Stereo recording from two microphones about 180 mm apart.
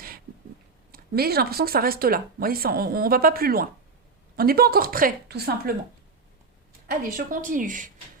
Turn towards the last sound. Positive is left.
turn(degrees=-45)  # may be behind; listen again after turning